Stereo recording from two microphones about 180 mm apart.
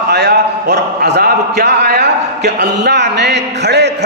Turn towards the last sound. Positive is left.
turn(degrees=-70)  # may be behind; listen again after turning